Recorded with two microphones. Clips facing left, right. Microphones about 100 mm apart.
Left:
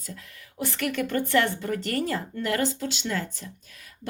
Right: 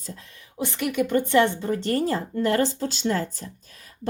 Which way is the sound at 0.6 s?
20° right (ahead or behind).